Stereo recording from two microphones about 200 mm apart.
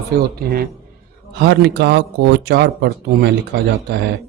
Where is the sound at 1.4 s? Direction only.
55° right (ahead or behind).